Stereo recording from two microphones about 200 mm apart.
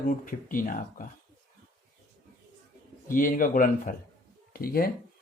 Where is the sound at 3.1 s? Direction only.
45° left (ahead or behind).